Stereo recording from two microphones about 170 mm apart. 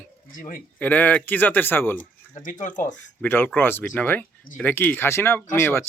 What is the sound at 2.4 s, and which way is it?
Speech, 50° left (ahead or behind).